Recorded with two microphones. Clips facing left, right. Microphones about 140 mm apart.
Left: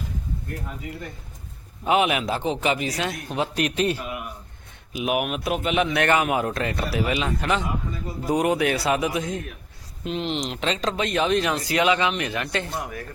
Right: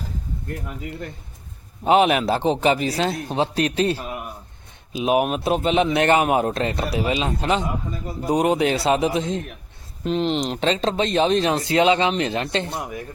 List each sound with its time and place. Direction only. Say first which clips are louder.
1.8 s a man's voice: right 4 dB; 30° right (ahead or behind)
10.0 s speech: right 5 dB; 40° right (ahead or behind); by 13.1 s 20° right (ahead or behind)